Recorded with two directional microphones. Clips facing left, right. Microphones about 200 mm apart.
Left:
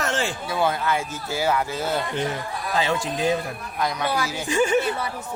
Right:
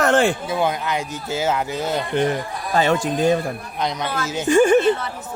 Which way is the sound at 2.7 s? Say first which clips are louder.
Right 6 dB; 50° right (ahead or behind).